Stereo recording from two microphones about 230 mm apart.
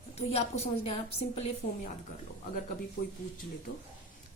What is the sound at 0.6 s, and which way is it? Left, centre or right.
Speech, left.